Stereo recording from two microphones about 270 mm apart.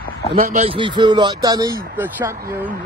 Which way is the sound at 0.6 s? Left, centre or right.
Centre.